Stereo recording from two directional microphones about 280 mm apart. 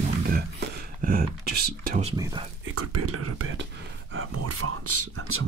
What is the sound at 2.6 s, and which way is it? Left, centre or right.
Speech, right.